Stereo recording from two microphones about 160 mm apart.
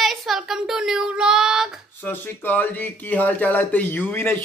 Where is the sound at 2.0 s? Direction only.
10° left (ahead or behind).